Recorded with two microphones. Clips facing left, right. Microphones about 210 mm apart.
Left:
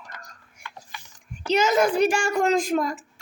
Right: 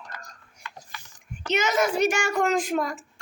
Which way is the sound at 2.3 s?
30° left (ahead or behind).